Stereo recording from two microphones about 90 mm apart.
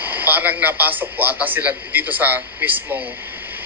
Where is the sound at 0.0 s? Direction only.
20° right (ahead or behind).